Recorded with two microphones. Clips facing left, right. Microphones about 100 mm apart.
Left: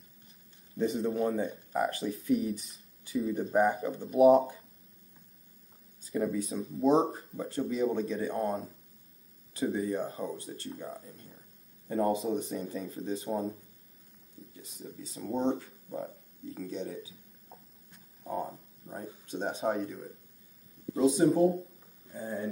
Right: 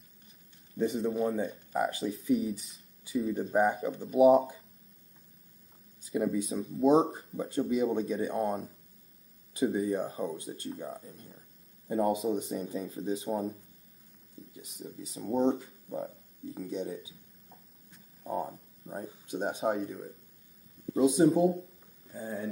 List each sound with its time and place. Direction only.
0.7 s speech: centre (ahead or behind)
6.0 s a sound: 5° right (ahead or behind)
6.5 s speech: centre (ahead or behind)
6.9 s speech: 15° right (ahead or behind)
15.3 s speech: 10° right (ahead or behind)
18.2 s a sound: 5° right (ahead or behind)
18.9 s speech: 10° right (ahead or behind)
19.8 s speech: 5° right (ahead or behind)
21.2 s speech: 15° right (ahead or behind)
22.1 s speech: centre (ahead or behind)